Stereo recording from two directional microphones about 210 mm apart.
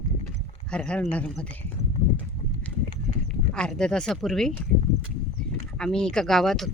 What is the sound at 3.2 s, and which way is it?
Speech, 5° left (ahead or behind).